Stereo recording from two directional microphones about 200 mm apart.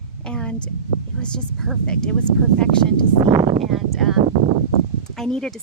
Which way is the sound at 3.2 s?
25° right (ahead or behind).